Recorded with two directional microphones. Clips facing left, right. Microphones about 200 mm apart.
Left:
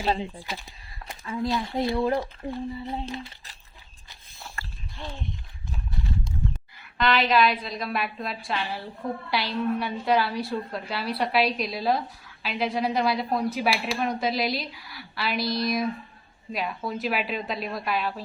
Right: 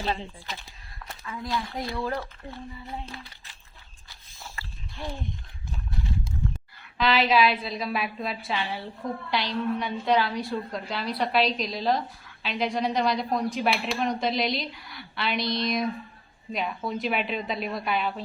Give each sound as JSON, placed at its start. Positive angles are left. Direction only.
{"t": 0.2, "sound": "speech", "side_deg": 15}
{"t": 1.2, "sound": "speech", "side_deg": 25}
{"t": 4.6, "sound": "a sound", "side_deg": 50}
{"t": 7.0, "sound": "a woman's voice", "side_deg": -5}